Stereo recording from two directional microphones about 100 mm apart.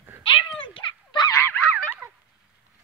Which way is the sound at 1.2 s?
30° left (ahead or behind).